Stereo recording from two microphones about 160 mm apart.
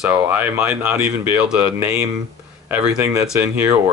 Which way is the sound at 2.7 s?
5° right (ahead or behind).